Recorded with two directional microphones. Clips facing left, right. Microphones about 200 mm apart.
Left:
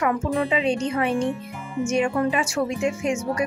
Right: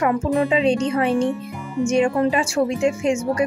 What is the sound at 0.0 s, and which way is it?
Speech, 35° right (ahead or behind).